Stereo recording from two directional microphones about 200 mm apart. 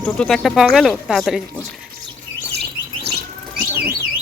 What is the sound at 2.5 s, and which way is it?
Chirp, 55° right (ahead or behind).